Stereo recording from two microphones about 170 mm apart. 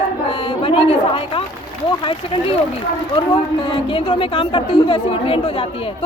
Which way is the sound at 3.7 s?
30° left (ahead or behind).